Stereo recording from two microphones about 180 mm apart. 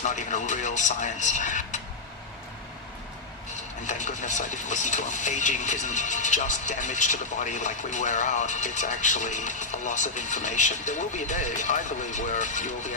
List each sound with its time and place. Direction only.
0.0 s speech: 40° left (ahead or behind)
3.8 s speech: 40° left (ahead or behind)